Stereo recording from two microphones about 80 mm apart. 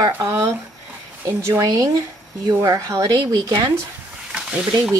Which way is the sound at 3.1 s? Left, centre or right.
Right.